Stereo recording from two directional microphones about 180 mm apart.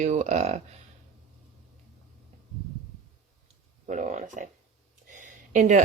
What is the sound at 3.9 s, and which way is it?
Speech, 40° right (ahead or behind).